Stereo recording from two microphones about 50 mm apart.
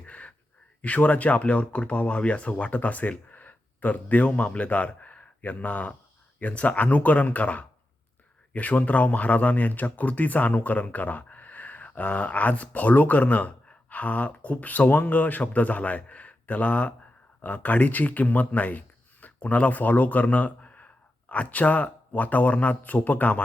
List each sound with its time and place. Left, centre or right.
0.0 s gasp: left
0.8 s speech: left